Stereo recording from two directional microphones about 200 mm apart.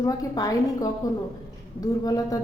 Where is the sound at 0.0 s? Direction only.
15° left (ahead or behind).